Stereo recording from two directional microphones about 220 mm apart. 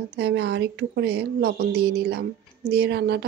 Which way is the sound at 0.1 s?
50° right (ahead or behind).